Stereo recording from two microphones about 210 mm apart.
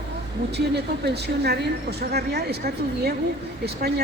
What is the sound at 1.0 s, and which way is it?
A woman's voice, 50° right (ahead or behind).